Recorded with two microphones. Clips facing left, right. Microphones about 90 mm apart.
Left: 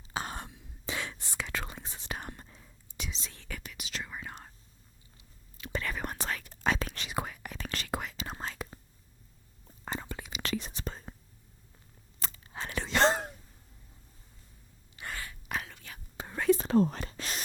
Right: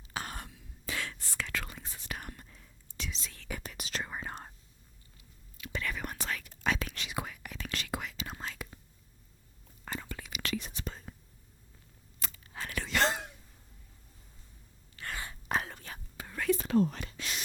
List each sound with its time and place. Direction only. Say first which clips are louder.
0.1 s whispering: left 3 dB; 25° left (ahead or behind)
3.6 s whispering: right 2 dB; 40° right (ahead or behind)
5.5 s whispering: left 2 dB; 35° left (ahead or behind)
9.8 s whispering: left 3 dB; 30° left (ahead or behind)
12.2 s biting: left 2 dB; 30° left (ahead or behind)
15.2 s whispering: right 6 dB; 35° right (ahead or behind)
16.1 s whispering: left 4 dB; 25° left (ahead or behind)